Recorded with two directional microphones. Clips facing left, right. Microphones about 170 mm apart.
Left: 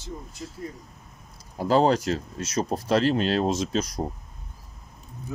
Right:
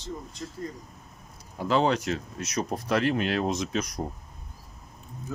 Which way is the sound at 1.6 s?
35° left (ahead or behind).